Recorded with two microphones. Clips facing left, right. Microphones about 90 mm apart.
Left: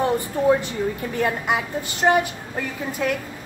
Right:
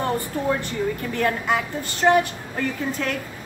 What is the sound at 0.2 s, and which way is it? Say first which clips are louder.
A woman's voice: left 5 dB; 15° left (ahead or behind).